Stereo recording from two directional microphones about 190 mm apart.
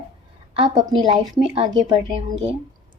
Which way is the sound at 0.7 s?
20° right (ahead or behind).